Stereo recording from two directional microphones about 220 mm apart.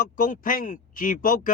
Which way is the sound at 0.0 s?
40° left (ahead or behind).